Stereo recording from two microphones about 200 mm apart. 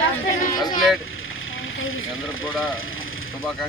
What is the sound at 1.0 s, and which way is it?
Vehicle, 85° left.